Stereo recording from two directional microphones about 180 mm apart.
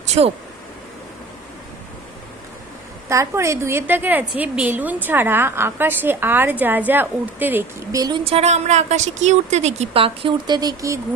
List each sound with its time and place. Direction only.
0.0 s speech: 35° right (ahead or behind)
3.1 s a woman's voice: 15° right (ahead or behind)
8.0 s a woman's voice: 30° right (ahead or behind)